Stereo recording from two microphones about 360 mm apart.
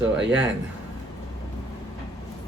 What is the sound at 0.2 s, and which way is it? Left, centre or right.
Speech, right.